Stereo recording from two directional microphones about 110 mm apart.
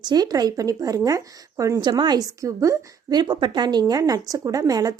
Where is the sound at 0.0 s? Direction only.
40° right (ahead or behind).